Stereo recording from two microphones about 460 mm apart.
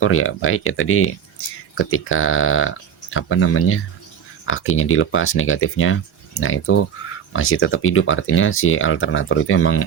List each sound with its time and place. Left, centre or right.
0.0 s speech: left